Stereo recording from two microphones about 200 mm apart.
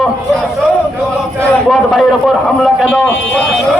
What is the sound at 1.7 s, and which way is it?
A man's voice, centre (ahead or behind).